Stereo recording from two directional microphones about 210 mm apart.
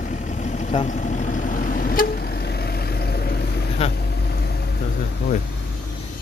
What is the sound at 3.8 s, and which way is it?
Speech, 30° left (ahead or behind).